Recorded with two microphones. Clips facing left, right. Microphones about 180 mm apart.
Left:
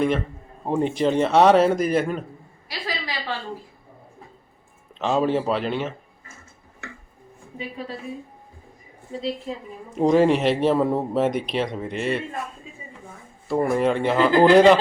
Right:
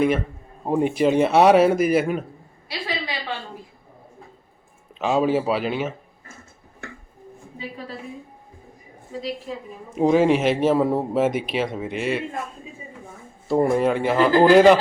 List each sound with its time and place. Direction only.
0.6 s a man's voice: 10° right (ahead or behind)
2.6 s a sound: 25° right (ahead or behind)
4.9 s speech: 5° right (ahead or behind)
9.5 s a woman's voice: 25° left (ahead or behind)
9.9 s speech: centre (ahead or behind)
13.7 s speech: 5° right (ahead or behind)